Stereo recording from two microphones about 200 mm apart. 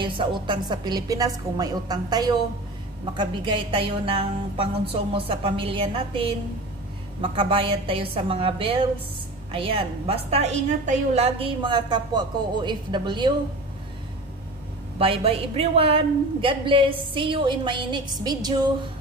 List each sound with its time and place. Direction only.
0.0 s a woman's voice: 25° right (ahead or behind)
15.0 s a woman's voice: 30° right (ahead or behind)